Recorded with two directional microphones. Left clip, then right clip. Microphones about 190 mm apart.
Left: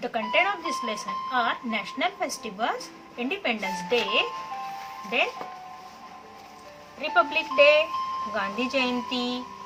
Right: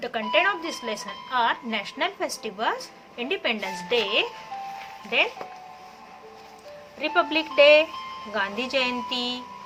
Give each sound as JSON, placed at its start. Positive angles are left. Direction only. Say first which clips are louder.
{"t": 0.0, "sound": "a woman's voice", "louder": "right 1 dB", "side_deg": -55}
{"t": 7.0, "sound": "a woman's voice", "louder": "even", "side_deg": -55}